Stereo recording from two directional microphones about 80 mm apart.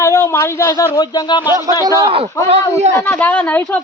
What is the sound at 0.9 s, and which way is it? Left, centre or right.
Speech, left.